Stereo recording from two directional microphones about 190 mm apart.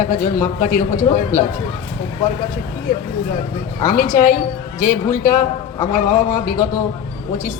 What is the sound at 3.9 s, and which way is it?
A man's voice, 45° left (ahead or behind).